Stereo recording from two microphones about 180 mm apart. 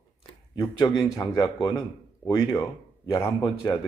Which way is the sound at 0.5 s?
20° left (ahead or behind).